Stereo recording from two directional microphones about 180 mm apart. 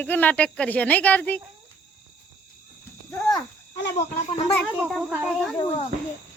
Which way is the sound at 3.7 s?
70° left (ahead or behind).